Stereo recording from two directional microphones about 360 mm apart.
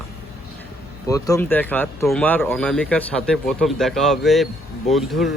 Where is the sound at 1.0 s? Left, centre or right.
Centre.